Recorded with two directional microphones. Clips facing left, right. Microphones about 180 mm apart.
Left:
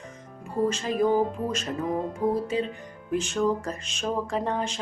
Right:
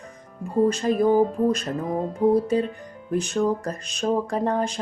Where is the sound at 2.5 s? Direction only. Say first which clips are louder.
Right 4 dB; 45° right (ahead or behind).